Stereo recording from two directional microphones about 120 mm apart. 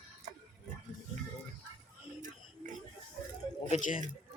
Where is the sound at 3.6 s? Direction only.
70° left (ahead or behind).